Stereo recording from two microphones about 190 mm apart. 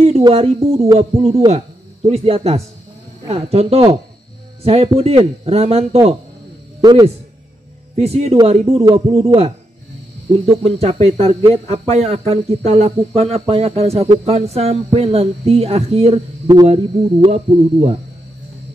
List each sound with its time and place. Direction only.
0.0 s a sound: 30° right (ahead or behind)
0.7 s speech: 35° right (ahead or behind)
6.8 s a man's voice: 20° right (ahead or behind)
7.9 s speech: 35° right (ahead or behind)
10.6 s speech: 30° right (ahead or behind)